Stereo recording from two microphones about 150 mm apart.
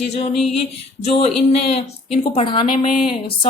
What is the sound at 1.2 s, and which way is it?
Speech, 40° left (ahead or behind).